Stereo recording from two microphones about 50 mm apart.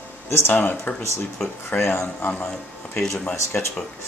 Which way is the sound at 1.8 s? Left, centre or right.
Left.